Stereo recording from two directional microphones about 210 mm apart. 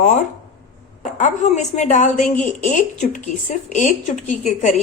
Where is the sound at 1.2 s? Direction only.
35° left (ahead or behind).